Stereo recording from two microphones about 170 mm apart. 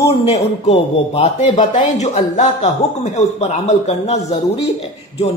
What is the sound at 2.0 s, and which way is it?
A man's voice, 45° left (ahead or behind).